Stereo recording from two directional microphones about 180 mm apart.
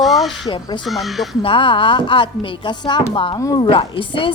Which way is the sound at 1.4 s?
30° left (ahead or behind).